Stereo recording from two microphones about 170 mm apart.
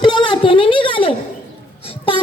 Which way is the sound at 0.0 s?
30° left (ahead or behind).